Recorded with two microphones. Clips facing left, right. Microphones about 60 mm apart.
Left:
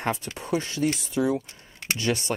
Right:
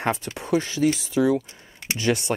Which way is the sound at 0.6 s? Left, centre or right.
Right.